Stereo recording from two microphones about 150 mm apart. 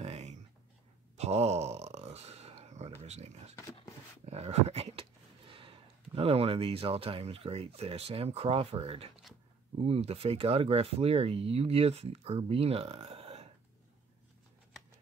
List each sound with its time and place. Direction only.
0.0 s a sound: 45° right (ahead or behind)
3.0 s dog: 45° right (ahead or behind)
5.5 s speech: 35° right (ahead or behind)